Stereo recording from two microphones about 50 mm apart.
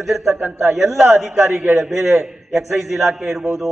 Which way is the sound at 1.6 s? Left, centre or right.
Right.